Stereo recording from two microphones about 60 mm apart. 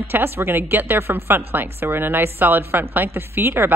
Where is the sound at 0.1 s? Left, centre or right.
Right.